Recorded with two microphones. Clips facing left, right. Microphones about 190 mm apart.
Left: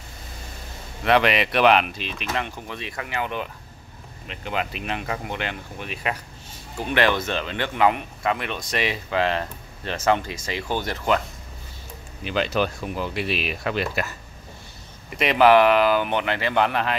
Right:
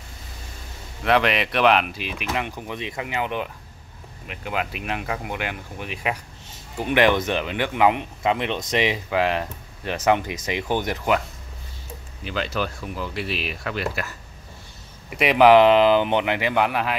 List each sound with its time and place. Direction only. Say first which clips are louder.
1.0 s speech: left 1 dB; centre (ahead or behind)
12.2 s speech: left 3 dB; 20° left (ahead or behind)
15.0 s speech: right 2 dB; 10° right (ahead or behind)